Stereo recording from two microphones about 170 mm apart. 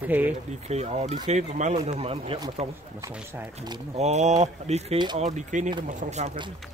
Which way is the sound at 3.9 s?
40° right (ahead or behind).